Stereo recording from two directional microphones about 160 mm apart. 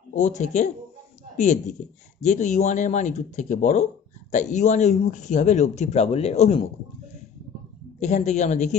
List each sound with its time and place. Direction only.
0.1 s speech: 50° left (ahead or behind)
7.9 s speech: 45° left (ahead or behind)